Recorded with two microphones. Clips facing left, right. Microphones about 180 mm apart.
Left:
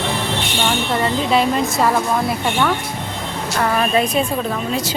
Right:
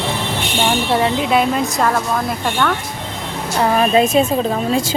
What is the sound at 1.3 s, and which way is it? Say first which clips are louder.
A woman's voice: right 1 dB; centre (ahead or behind).